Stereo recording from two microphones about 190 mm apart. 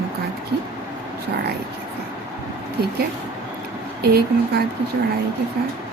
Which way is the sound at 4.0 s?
55° right (ahead or behind).